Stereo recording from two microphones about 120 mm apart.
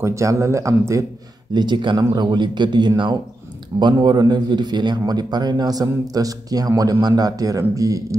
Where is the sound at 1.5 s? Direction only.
40° right (ahead or behind).